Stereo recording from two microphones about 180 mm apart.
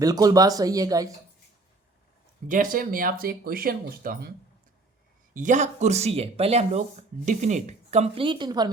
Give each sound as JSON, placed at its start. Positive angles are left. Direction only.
{"t": 0.0, "sound": "speech", "side_deg": -20}
{"t": 2.5, "sound": "speech", "side_deg": -50}
{"t": 5.3, "sound": "speech", "side_deg": -45}